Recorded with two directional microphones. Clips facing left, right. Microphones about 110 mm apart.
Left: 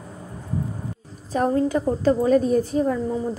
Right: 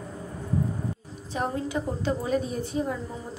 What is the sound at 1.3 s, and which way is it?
A woman's voice, 40° left (ahead or behind).